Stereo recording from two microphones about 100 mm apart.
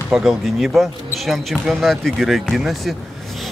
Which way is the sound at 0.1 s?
Centre (ahead or behind).